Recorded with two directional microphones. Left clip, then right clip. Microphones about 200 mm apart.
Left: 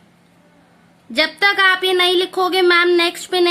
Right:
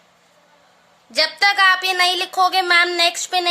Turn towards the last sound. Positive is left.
turn(degrees=-5)  # may be behind; listen again after turning